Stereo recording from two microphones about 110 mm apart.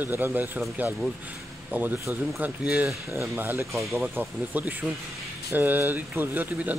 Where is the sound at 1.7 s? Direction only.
20° right (ahead or behind).